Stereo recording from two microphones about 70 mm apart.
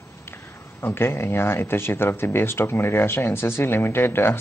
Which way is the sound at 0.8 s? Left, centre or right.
Left.